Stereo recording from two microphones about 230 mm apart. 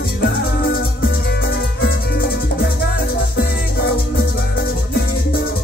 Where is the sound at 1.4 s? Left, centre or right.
Left.